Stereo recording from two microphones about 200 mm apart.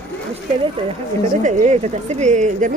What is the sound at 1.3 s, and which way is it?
Speech, 40° right (ahead or behind).